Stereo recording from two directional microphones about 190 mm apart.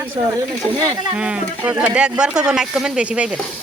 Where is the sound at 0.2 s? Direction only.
25° right (ahead or behind).